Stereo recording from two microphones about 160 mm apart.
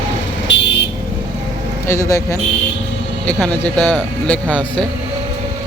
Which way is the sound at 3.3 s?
10° left (ahead or behind).